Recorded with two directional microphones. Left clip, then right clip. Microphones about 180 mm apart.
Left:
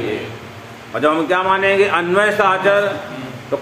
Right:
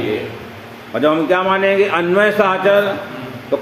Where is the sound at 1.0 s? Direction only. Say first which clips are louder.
Right 1 dB; 35° right (ahead or behind).